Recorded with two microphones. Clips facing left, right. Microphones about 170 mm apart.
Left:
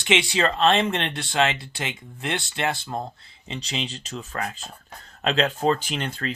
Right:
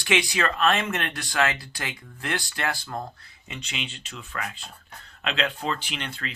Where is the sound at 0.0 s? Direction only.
25° left (ahead or behind).